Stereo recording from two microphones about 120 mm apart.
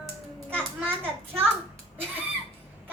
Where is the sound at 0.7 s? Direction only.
20° right (ahead or behind).